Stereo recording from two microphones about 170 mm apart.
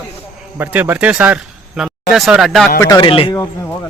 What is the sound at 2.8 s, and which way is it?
Speech, 25° left (ahead or behind).